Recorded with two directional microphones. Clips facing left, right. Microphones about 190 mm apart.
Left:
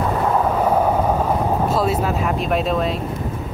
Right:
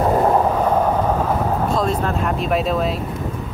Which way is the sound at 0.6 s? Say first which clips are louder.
Even; 10° left (ahead or behind).